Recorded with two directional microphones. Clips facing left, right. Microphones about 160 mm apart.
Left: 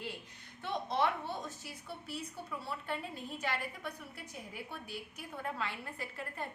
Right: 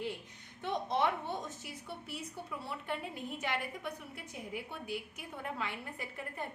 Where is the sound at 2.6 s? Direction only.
20° right (ahead or behind).